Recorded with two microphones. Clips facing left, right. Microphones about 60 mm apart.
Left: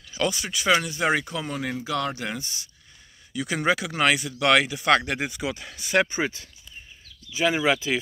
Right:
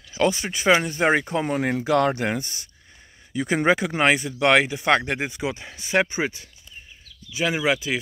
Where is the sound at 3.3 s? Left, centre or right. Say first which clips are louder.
Right 4 dB; right.